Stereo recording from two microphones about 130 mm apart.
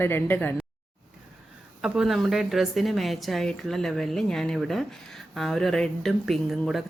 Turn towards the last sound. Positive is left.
turn(degrees=0)  # may be behind; listen again after turning